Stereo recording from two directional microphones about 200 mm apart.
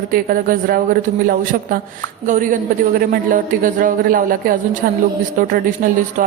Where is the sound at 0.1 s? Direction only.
45° right (ahead or behind).